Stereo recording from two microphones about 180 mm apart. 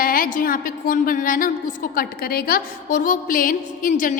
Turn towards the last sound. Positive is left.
turn(degrees=50)  # may be behind; listen again after turning